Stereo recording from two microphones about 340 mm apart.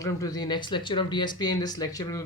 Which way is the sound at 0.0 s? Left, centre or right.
Centre.